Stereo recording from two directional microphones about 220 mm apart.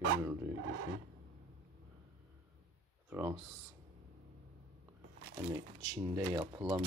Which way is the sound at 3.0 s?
10° right (ahead or behind).